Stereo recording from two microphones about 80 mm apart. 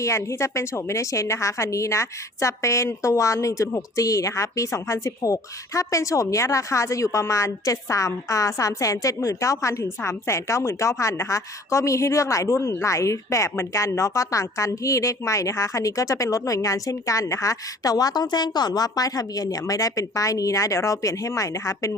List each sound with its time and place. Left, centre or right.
0.0 s a woman's voice: left